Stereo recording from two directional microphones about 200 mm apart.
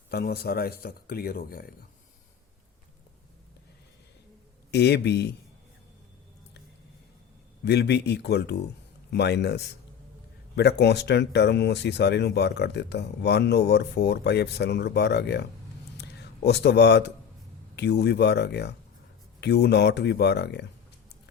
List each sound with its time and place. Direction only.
0.1 s speech: 50° left (ahead or behind)
4.7 s speech: 55° left (ahead or behind)
7.6 s speech: 55° left (ahead or behind)
16.0 s a sound: 55° left (ahead or behind)
17.7 s speech: 55° left (ahead or behind)